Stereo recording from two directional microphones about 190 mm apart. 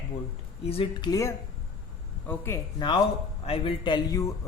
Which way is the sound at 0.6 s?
30° left (ahead or behind).